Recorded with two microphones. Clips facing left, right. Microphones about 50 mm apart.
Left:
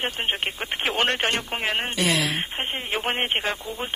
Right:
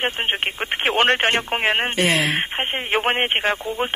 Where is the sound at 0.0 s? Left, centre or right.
Right.